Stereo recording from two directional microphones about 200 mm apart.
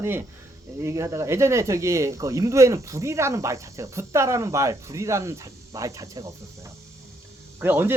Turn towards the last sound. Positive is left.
turn(degrees=-10)  # may be behind; listen again after turning